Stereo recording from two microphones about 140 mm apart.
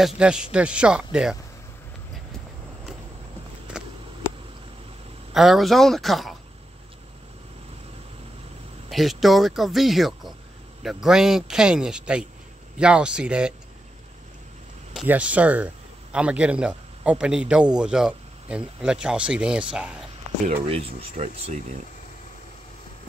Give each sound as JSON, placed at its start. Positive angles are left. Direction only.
{"t": 0.0, "sound": "speech", "side_deg": -5}
{"t": 5.3, "sound": "a man's voice", "side_deg": 0}
{"t": 8.9, "sound": "a man's voice", "side_deg": 0}
{"t": 15.0, "sound": "a man's voice", "side_deg": -10}
{"t": 20.6, "sound": "speech", "side_deg": -45}